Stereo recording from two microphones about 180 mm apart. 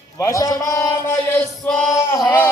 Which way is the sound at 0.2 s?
15° left (ahead or behind).